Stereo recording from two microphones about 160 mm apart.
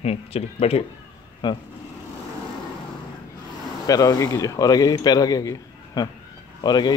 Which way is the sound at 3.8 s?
20° left (ahead or behind).